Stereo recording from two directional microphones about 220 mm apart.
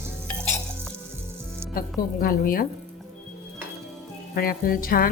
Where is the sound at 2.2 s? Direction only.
40° left (ahead or behind).